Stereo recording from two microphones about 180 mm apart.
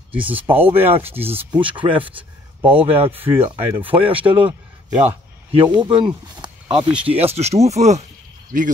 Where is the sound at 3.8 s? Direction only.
30° right (ahead or behind).